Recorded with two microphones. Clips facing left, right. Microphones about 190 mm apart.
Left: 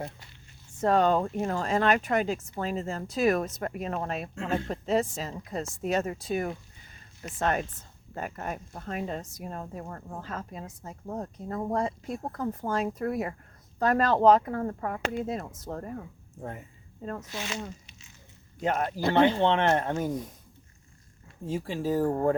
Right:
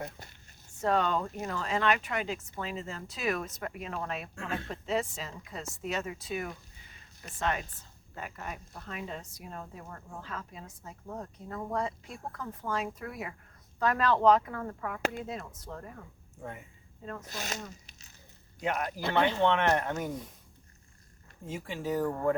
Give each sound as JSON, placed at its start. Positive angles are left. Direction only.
{"t": 0.8, "sound": "speech", "side_deg": 40}
{"t": 17.2, "sound": "speech", "side_deg": -40}
{"t": 18.6, "sound": "speech", "side_deg": 35}
{"t": 21.4, "sound": "speech", "side_deg": 35}